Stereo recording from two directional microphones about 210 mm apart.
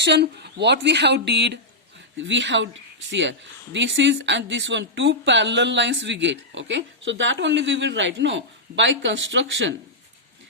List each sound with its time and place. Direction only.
0.0 s speech: 55° right (ahead or behind)